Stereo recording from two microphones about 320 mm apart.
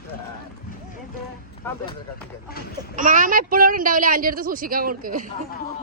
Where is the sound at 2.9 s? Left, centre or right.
Right.